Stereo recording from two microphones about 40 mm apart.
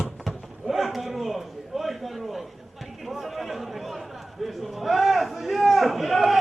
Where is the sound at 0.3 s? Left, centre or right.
Centre.